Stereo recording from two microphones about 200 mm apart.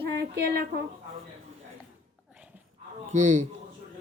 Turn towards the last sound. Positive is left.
turn(degrees=-35)  # may be behind; listen again after turning